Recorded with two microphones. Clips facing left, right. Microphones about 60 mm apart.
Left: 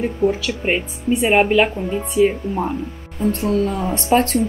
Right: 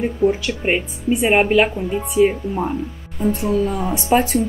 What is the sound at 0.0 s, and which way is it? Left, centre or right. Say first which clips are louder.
Speech: right 1 dB; centre.